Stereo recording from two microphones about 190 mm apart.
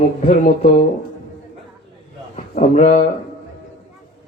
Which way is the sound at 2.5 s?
35° left (ahead or behind).